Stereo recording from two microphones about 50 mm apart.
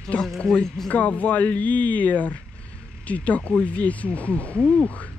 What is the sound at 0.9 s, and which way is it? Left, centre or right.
Speech, left.